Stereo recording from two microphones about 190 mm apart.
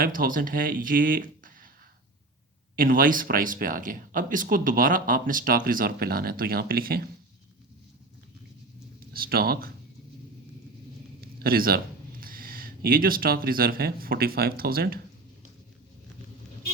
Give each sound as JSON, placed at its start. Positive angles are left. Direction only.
{"t": 0.0, "sound": "speech", "side_deg": -50}
{"t": 2.7, "sound": "speech", "side_deg": -45}
{"t": 9.1, "sound": "speech", "side_deg": -50}
{"t": 11.2, "sound": "a sound", "side_deg": -50}
{"t": 12.2, "sound": "speech", "side_deg": -50}